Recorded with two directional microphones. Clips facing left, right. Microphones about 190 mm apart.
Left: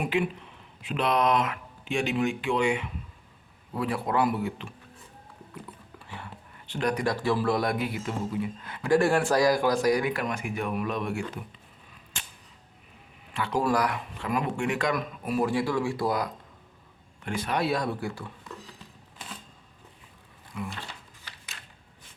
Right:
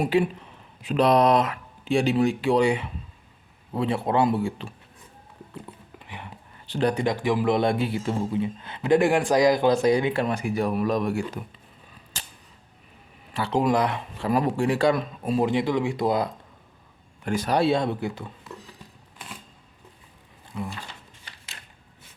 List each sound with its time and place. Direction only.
0.0 s speech: 35° right (ahead or behind)
5.6 s a sound: 20° right (ahead or behind)
6.7 s speech: 30° right (ahead or behind)
13.3 s speech: 30° right (ahead or behind)
13.6 s speech: 20° right (ahead or behind)
17.2 s speech: 40° right (ahead or behind); by 18.3 s 20° right (ahead or behind)
20.5 s speech: 30° right (ahead or behind)